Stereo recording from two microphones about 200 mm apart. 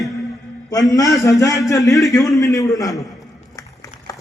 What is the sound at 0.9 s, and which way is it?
A man's voice, 15° left (ahead or behind).